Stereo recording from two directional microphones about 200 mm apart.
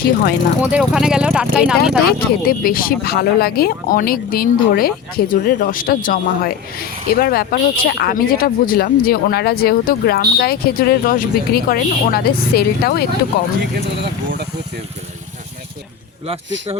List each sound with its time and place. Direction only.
0.6 s speech: 5° right (ahead or behind)
2.0 s speech: 50° left (ahead or behind)
14.0 s speech: 55° right (ahead or behind)